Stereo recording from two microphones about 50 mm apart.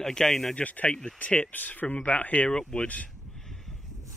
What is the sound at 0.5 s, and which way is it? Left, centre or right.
Speech, left.